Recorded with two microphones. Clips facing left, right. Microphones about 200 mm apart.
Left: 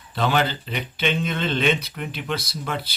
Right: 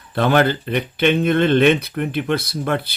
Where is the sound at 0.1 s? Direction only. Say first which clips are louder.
Right 6 dB; 55° right (ahead or behind).